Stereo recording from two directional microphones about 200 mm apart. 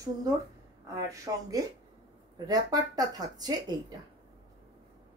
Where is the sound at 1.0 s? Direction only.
15° right (ahead or behind).